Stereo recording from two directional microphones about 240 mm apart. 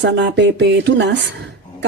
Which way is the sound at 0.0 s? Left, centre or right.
Right.